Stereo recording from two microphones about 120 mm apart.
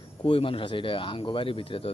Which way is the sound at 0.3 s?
50° left (ahead or behind).